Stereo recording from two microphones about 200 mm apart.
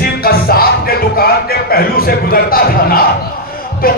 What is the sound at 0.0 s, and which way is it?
Music, 50° left (ahead or behind).